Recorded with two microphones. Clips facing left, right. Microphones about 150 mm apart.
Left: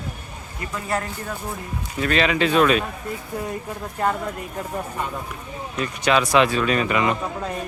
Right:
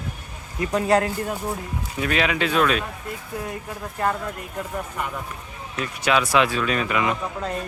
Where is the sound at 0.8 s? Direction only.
70° right (ahead or behind).